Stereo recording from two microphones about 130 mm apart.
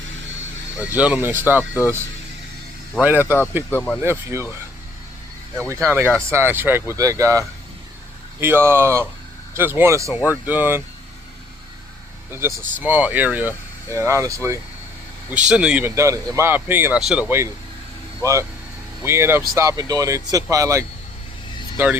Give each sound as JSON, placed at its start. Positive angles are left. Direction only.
{"t": 0.8, "sound": "speech", "side_deg": -10}
{"t": 3.0, "sound": "speech", "side_deg": -15}
{"t": 3.7, "sound": "speech", "side_deg": 15}
{"t": 4.0, "sound": "speech", "side_deg": -20}
{"t": 5.6, "sound": "speech", "side_deg": -20}
{"t": 12.3, "sound": "speech", "side_deg": -20}
{"t": 15.3, "sound": "speech", "side_deg": -10}
{"t": 16.0, "sound": "speech", "side_deg": -25}
{"t": 17.0, "sound": "speech", "side_deg": -5}
{"t": 17.2, "sound": "speech", "side_deg": -20}